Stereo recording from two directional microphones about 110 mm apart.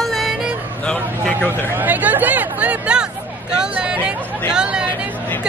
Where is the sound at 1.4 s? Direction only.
15° right (ahead or behind).